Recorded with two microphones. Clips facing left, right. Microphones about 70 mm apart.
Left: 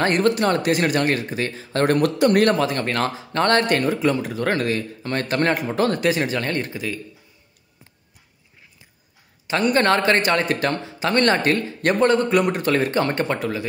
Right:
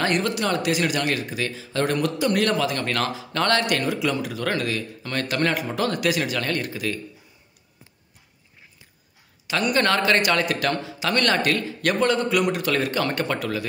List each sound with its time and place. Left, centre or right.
0.0 s speech: left
9.5 s speech: left